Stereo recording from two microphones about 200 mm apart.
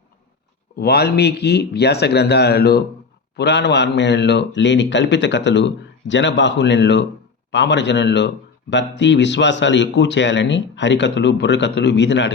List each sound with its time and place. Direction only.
0.8 s a man's voice: 50° left (ahead or behind)